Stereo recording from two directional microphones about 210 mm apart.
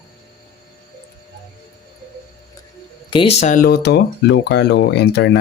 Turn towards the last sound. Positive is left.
turn(degrees=55)  # may be behind; listen again after turning